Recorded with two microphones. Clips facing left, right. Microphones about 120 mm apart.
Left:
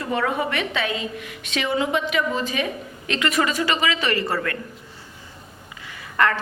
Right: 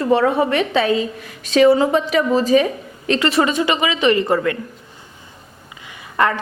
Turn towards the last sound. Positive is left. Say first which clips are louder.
# right 3 dB
turn(degrees=-20)  # may be behind; listen again after turning